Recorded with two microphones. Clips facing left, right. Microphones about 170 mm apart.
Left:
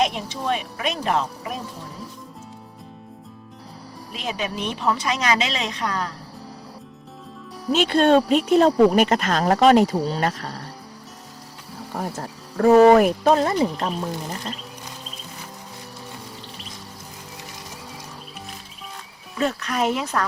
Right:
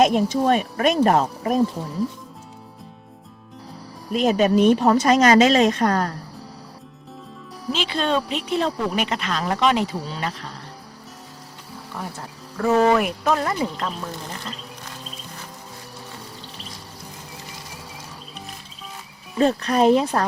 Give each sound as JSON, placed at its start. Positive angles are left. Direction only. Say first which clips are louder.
{"t": 0.0, "sound": "a woman's voice", "louder": "right 7 dB", "side_deg": -45}
{"t": 4.1, "sound": "a woman's voice", "louder": "right 11 dB", "side_deg": -45}
{"t": 7.7, "sound": "speech", "louder": "left 6 dB", "side_deg": 50}
{"t": 11.9, "sound": "speech", "louder": "left 5 dB", "side_deg": 40}
{"t": 19.4, "sound": "speech", "louder": "right 5 dB", "side_deg": -35}